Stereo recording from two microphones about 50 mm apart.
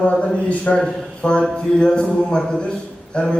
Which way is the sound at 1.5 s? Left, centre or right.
Centre.